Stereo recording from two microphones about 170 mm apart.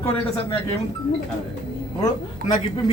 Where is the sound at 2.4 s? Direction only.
60° right (ahead or behind).